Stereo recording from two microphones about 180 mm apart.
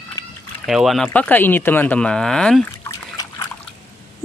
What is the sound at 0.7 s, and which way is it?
Speech, centre (ahead or behind).